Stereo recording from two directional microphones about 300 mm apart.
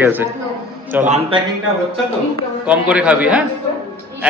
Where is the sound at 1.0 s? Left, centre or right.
Right.